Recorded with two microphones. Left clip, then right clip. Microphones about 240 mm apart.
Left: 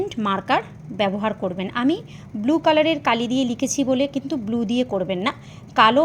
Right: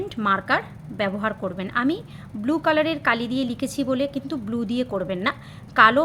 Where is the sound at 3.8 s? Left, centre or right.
Centre.